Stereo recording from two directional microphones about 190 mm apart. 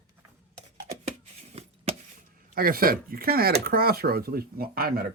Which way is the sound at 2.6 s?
50° right (ahead or behind).